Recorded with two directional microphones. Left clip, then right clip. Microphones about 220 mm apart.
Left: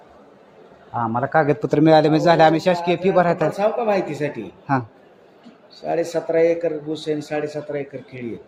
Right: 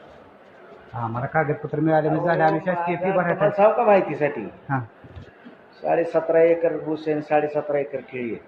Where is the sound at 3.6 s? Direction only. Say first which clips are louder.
Right 7 dB; 45° left (ahead or behind).